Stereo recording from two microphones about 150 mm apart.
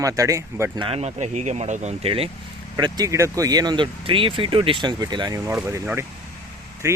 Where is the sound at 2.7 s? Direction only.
25° right (ahead or behind).